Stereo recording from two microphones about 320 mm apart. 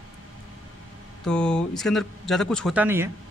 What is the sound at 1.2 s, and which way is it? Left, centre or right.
A man's voice, centre.